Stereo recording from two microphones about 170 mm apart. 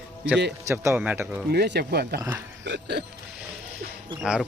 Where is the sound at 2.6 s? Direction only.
85° right.